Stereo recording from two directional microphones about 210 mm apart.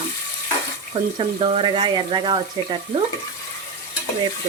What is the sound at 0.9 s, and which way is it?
Speech, 25° right (ahead or behind).